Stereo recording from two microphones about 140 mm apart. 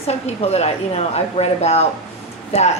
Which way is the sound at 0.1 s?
50° left (ahead or behind).